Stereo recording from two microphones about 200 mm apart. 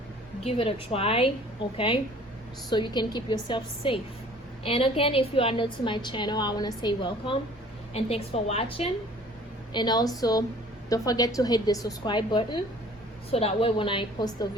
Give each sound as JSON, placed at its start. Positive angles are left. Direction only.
{"t": 0.4, "sound": "a woman's voice", "side_deg": 30}